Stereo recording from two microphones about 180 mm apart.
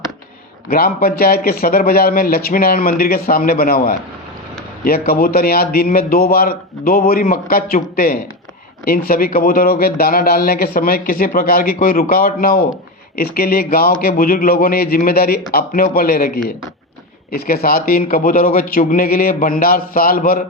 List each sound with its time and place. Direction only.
0.7 s a man's voice: 55° left (ahead or behind)